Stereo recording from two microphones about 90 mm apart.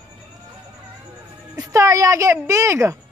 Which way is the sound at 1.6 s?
35° right (ahead or behind).